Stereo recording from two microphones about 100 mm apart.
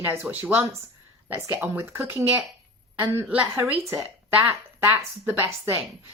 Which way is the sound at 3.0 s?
15° right (ahead or behind).